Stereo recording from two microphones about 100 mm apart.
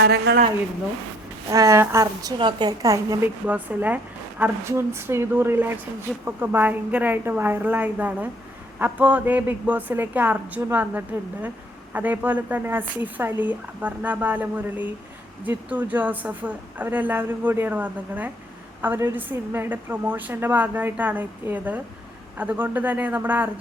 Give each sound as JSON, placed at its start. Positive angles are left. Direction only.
{"t": 1.5, "sound": "a woman's voice", "side_deg": -35}
{"t": 3.4, "sound": "speech", "side_deg": -15}
{"t": 4.6, "sound": "a woman's voice", "side_deg": -25}